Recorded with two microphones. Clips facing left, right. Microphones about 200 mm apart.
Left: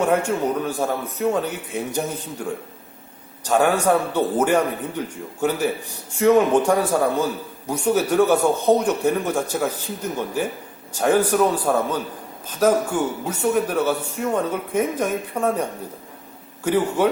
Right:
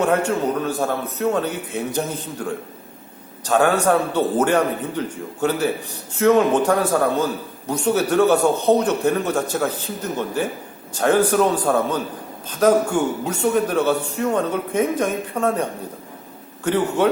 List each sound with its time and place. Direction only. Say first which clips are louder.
0.0 s a man's voice: right 1 dB; 10° left (ahead or behind)
10.9 s a man's voice: right 1 dB; 10° left (ahead or behind)
16.6 s a man's voice: even; 10° left (ahead or behind)